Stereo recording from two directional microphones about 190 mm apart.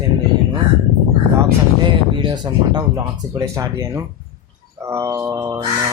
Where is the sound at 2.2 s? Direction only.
25° right (ahead or behind).